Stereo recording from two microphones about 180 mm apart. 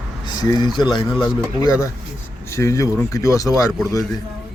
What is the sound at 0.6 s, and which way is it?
Speech, 25° left (ahead or behind).